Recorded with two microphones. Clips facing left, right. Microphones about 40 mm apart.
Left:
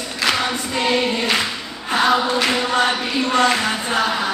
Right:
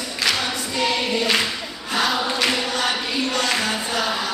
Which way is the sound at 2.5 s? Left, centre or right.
Left.